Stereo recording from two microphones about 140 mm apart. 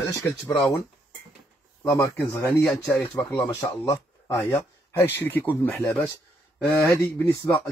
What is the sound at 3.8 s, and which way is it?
Speech, 20° left (ahead or behind).